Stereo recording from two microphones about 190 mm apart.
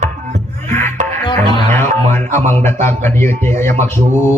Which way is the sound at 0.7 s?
10° left (ahead or behind).